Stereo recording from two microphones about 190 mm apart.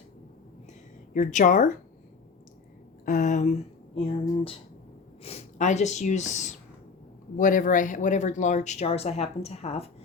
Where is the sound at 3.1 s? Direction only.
40° left (ahead or behind).